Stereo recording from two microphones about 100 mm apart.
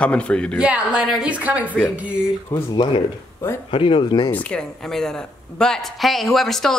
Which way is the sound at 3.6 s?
60° left (ahead or behind).